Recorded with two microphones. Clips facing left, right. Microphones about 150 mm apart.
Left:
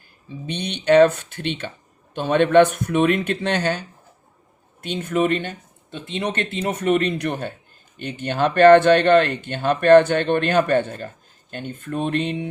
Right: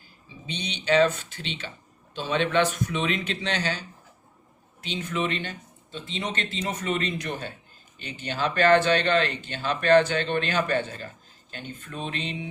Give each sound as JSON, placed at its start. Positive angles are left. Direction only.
{"t": 0.3, "sound": "speech", "side_deg": 55}